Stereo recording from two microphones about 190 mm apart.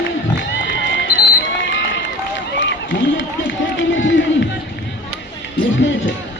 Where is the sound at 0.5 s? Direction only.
70° left (ahead or behind).